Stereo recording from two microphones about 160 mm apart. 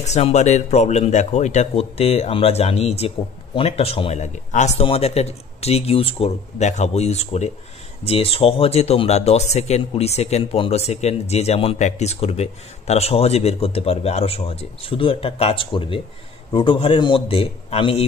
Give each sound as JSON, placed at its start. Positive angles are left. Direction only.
{"t": 0.0, "sound": "speech", "side_deg": 45}